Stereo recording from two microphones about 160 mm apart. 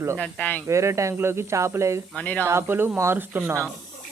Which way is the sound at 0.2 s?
10° left (ahead or behind).